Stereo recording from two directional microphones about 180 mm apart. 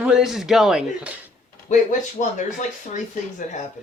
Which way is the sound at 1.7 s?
45° left (ahead or behind).